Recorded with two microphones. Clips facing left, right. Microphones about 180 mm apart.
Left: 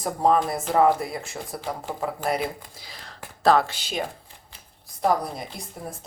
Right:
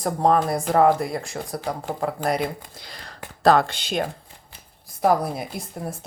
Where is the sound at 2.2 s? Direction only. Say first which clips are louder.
Right 2 dB; 5° left (ahead or behind).